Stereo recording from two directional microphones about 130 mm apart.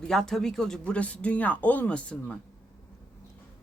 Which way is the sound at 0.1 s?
5° left (ahead or behind).